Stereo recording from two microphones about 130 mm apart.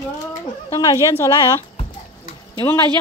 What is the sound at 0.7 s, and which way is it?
Speech, 25° left (ahead or behind).